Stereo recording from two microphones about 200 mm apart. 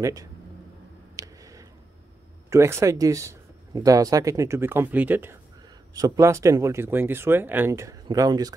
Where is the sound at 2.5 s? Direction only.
15° right (ahead or behind).